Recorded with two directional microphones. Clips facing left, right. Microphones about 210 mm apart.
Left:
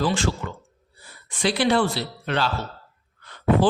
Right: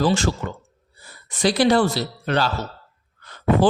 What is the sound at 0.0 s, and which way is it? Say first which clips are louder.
A woman's voice: right 3 dB; 40° right (ahead or behind).